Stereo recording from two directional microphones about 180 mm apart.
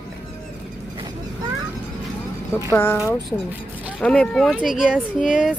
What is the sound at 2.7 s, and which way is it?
Speech, 10° left (ahead or behind).